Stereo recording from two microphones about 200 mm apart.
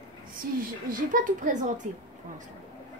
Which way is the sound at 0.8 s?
40° right (ahead or behind).